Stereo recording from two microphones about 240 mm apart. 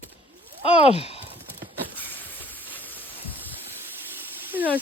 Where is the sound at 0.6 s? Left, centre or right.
Left.